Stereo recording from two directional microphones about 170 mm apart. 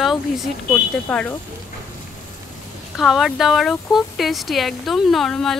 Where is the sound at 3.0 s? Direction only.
Centre (ahead or behind).